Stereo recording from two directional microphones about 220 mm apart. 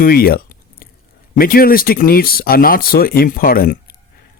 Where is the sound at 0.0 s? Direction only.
40° left (ahead or behind).